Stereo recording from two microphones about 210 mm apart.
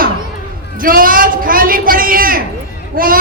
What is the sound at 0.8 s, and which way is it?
A man's voice, 40° right (ahead or behind).